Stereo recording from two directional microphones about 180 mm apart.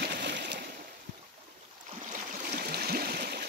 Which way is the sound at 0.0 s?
70° right (ahead or behind).